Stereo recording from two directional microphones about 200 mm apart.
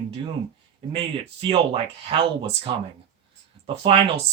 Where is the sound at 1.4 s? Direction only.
25° right (ahead or behind).